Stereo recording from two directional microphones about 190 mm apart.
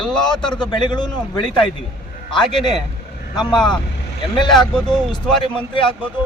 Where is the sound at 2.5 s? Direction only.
25° left (ahead or behind).